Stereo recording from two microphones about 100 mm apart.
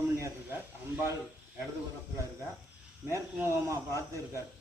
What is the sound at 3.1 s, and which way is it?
Speech, 30° right (ahead or behind).